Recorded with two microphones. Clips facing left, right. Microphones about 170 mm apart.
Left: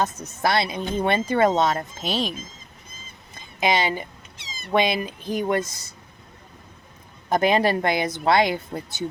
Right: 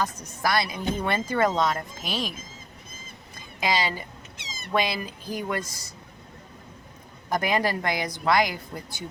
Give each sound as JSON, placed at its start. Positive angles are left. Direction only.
{"t": 0.0, "sound": "speech", "side_deg": 25}
{"t": 3.6, "sound": "speech", "side_deg": 25}
{"t": 7.3, "sound": "speech", "side_deg": 25}